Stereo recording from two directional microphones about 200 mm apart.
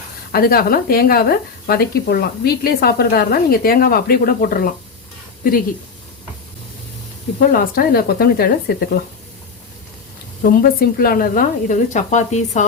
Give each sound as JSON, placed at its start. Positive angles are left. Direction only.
{"t": 0.3, "sound": "speech", "side_deg": 50}
{"t": 7.3, "sound": "speech", "side_deg": 50}
{"t": 10.4, "sound": "speech", "side_deg": 45}